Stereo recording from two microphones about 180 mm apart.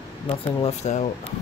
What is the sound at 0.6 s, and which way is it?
Speech, 35° left (ahead or behind).